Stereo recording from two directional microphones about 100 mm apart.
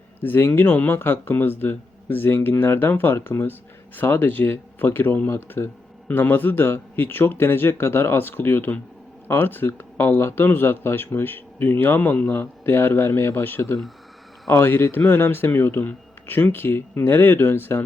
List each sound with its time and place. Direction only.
0.2 s speech: 20° left (ahead or behind)